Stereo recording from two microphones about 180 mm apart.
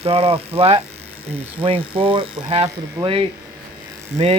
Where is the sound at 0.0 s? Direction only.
35° right (ahead or behind).